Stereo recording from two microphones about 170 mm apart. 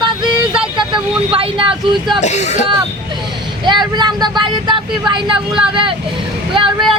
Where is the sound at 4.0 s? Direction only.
25° right (ahead or behind).